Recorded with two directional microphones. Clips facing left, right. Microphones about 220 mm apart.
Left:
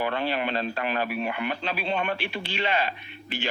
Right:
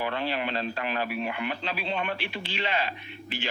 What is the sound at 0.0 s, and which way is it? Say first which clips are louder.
A man's voice: left 3 dB; 55° left (ahead or behind).